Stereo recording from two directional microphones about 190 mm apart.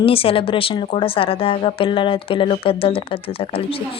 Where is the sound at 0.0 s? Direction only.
30° left (ahead or behind).